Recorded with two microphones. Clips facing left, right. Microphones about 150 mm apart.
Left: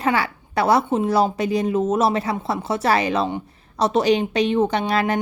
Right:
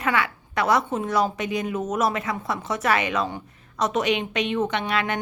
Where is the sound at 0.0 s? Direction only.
30° left (ahead or behind).